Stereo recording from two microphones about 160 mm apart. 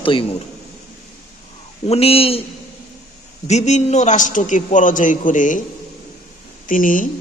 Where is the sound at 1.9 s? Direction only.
40° left (ahead or behind).